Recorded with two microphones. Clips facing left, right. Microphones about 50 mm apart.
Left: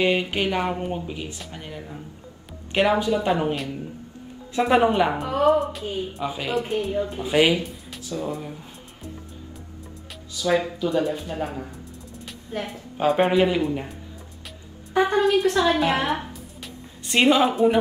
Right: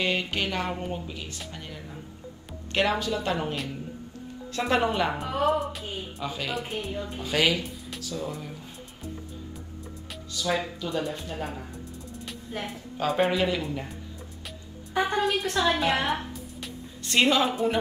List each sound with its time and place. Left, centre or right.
0.0 s speech: centre
3.5 s speech: centre
4.5 s speech: centre
5.2 s speech: centre
6.2 s speech: centre
6.5 s speech: centre
7.2 s speech: centre
10.3 s speech: centre
12.3 s music: centre
12.9 s speech: centre
15.0 s a woman's voice: centre
17.0 s speech: centre